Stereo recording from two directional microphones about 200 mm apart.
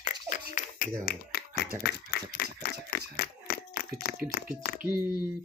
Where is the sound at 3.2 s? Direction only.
50° left (ahead or behind).